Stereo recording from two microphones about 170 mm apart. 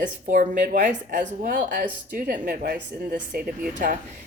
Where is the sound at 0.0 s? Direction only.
50° right (ahead or behind).